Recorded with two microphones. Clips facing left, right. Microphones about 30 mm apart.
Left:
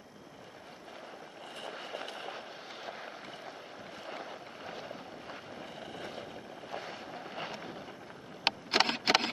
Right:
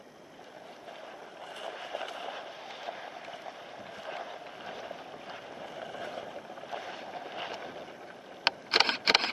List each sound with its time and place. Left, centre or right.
1.6 s vehicle: centre
2.2 s fireworks: centre
2.9 s a sound: centre
5.6 s vehicle: centre
6.9 s boat: centre
8.5 s a sound: right